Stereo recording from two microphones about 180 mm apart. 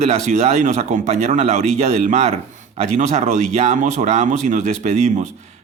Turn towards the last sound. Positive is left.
turn(degrees=-40)  # may be behind; listen again after turning